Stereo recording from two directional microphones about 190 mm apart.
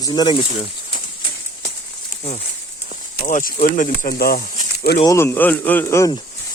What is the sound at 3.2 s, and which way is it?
Speech, 45° left (ahead or behind).